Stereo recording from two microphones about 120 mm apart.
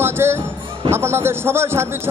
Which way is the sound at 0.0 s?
20° right (ahead or behind).